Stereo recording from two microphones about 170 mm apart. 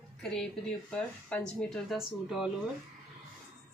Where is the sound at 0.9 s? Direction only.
5° left (ahead or behind).